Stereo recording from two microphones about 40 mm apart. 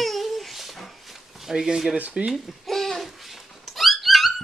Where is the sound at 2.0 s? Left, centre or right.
Right.